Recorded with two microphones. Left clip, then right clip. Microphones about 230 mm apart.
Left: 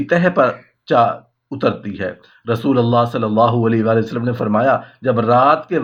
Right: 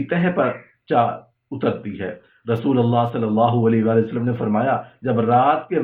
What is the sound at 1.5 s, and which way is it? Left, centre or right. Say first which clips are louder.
Speech: left 4 dB; left.